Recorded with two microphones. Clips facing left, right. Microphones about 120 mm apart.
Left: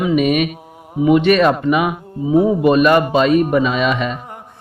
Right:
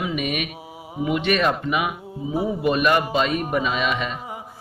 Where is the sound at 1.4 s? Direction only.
90° left.